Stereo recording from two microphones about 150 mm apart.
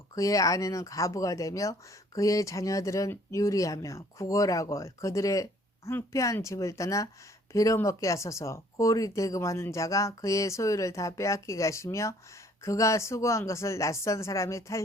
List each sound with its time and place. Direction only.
0.2 s speech: 20° left (ahead or behind)